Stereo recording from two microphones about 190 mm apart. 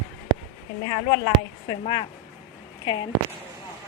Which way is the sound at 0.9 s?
25° left (ahead or behind).